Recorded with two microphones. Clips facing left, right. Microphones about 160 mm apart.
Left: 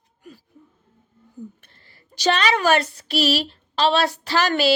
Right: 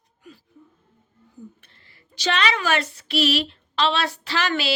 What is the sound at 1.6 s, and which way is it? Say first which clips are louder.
Speech: left 1 dB; 40° left (ahead or behind).